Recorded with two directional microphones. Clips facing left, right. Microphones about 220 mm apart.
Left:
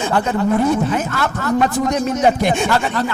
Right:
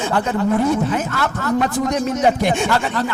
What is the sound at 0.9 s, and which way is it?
Speech, 20° left (ahead or behind).